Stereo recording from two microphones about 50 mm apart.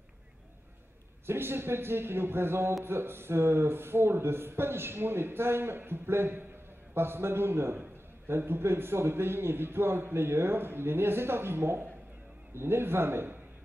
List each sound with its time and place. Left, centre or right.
1.2 s a man's voice: right